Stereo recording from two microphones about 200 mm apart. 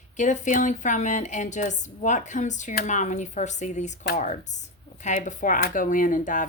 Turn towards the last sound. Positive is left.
turn(degrees=40)  # may be behind; listen again after turning